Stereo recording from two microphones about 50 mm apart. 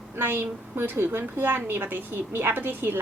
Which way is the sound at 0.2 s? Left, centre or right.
Right.